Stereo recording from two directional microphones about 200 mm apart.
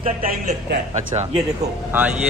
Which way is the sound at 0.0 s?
45° right (ahead or behind).